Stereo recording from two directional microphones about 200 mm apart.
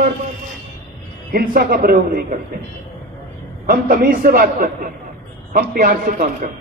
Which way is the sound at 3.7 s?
45° right (ahead or behind).